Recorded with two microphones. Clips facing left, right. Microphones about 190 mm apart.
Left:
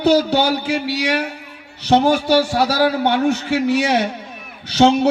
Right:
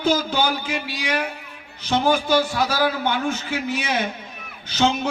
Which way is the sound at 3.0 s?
70° left (ahead or behind).